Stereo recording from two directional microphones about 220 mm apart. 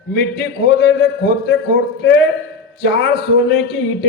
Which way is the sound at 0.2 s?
50° left (ahead or behind).